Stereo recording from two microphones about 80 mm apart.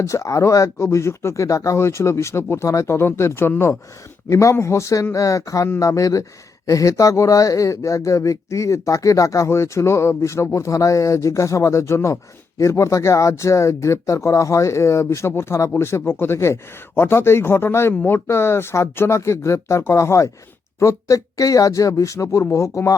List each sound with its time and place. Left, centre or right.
0.0 s speech: left
4.3 s speech: left